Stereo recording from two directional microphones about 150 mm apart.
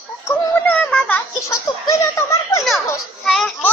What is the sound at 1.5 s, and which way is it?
Speech, 20° left (ahead or behind).